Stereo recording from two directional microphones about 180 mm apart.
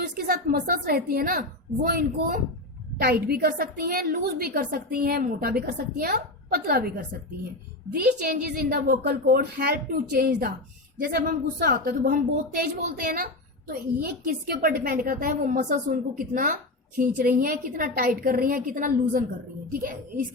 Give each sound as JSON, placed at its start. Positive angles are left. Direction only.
{"t": 0.2, "sound": "a woman's voice", "side_deg": -55}